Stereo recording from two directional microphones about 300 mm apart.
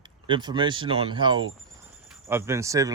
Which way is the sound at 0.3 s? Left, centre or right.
Centre.